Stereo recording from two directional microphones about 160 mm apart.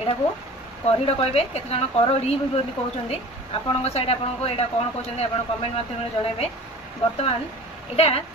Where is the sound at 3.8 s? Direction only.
40° left (ahead or behind).